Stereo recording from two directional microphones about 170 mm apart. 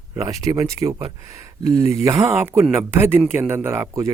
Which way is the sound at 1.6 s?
40° left (ahead or behind).